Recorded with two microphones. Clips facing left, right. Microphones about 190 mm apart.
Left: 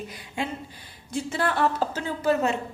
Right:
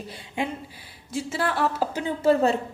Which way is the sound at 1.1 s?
Centre (ahead or behind).